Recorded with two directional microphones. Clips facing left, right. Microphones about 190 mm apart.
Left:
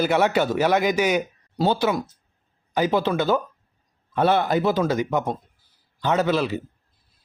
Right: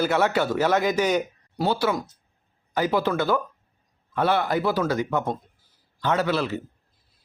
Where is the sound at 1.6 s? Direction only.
20° left (ahead or behind).